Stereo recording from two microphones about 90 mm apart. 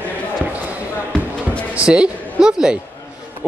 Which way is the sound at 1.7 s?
10° right (ahead or behind).